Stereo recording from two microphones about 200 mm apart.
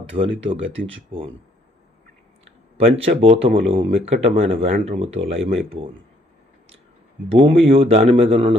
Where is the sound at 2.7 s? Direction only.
30° right (ahead or behind).